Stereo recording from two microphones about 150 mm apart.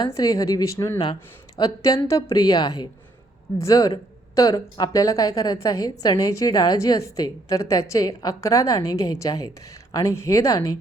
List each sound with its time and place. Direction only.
0.2 s speech: 25° left (ahead or behind)